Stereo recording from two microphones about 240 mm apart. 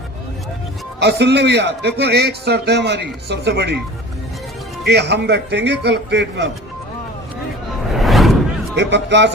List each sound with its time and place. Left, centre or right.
1.0 s a man's voice: right
4.9 s a man's voice: right
7.9 s a sound: centre
8.7 s speech: right